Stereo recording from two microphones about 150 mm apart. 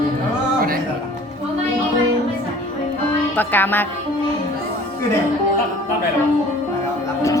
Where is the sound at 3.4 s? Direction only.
10° left (ahead or behind).